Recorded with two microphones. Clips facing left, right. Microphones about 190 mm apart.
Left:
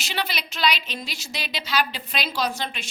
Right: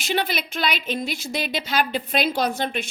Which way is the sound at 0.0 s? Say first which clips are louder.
Right 5 dB; 50° right (ahead or behind).